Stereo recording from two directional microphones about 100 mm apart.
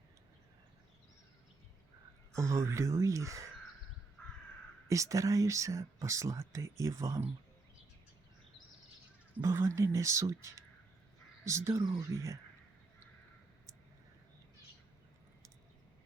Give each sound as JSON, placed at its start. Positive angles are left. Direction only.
{"t": 2.3, "sound": "speech", "side_deg": -30}
{"t": 4.2, "sound": "crow", "side_deg": 15}
{"t": 4.9, "sound": "speech", "side_deg": -30}
{"t": 9.4, "sound": "speech", "side_deg": -30}